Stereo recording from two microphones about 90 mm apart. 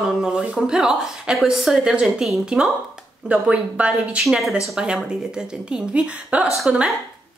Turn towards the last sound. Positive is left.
turn(degrees=-10)  # may be behind; listen again after turning